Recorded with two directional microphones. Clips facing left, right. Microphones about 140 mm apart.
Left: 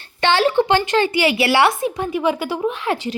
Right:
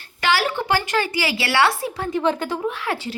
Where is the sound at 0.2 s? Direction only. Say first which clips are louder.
Left 6 dB; 25° left (ahead or behind).